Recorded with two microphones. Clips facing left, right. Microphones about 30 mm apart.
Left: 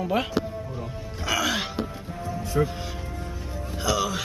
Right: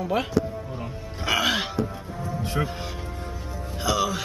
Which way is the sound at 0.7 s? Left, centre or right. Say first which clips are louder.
Even; right.